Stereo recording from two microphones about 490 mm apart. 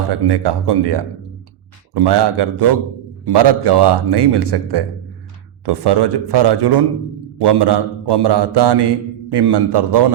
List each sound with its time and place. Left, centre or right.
0.1 s a man's voice: right